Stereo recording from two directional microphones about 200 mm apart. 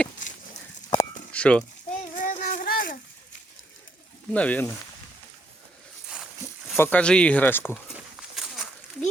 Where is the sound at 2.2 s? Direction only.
45° left (ahead or behind).